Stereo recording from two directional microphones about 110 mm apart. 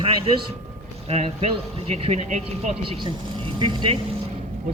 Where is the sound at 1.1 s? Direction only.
75° right (ahead or behind).